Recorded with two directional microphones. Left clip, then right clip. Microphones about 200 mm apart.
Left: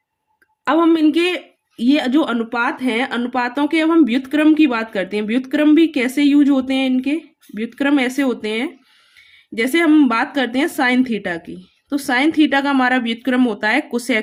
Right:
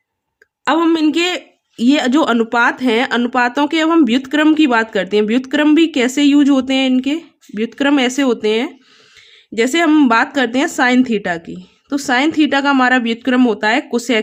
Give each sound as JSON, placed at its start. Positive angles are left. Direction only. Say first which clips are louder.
{"t": 0.6, "sound": "a woman's voice", "louder": "right 1 dB", "side_deg": -25}